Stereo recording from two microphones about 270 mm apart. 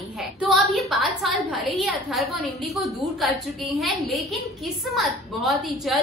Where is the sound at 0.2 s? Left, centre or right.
Centre.